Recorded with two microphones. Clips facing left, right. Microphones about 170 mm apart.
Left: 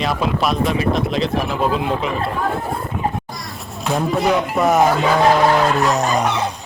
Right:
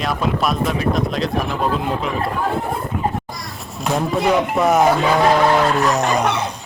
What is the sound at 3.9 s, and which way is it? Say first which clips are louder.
Speech: even; centre (ahead or behind).